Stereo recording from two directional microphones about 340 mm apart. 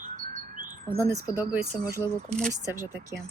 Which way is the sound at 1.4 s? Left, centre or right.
Centre.